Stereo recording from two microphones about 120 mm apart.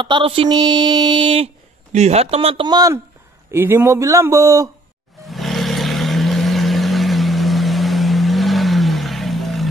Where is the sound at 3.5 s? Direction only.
20° right (ahead or behind).